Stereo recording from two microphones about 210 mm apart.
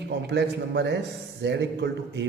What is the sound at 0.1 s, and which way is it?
A man's voice, 55° right (ahead or behind).